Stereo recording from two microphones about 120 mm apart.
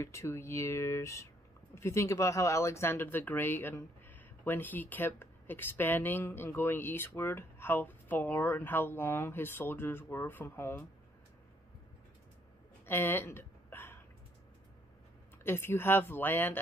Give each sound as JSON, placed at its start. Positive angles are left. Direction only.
{"t": 0.0, "sound": "speech", "side_deg": 20}
{"t": 12.8, "sound": "hiccup", "side_deg": 20}
{"t": 15.4, "sound": "speech", "side_deg": 20}